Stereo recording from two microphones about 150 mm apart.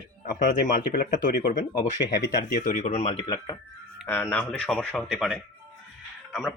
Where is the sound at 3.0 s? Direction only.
40° left (ahead or behind).